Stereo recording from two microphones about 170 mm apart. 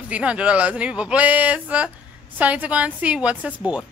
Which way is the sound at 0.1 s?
5° right (ahead or behind).